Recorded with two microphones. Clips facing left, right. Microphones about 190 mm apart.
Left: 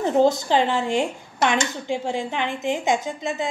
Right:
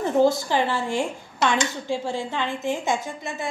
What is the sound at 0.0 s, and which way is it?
Speech, 20° left (ahead or behind).